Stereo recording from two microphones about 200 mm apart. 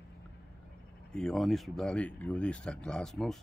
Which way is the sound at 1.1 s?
5° left (ahead or behind).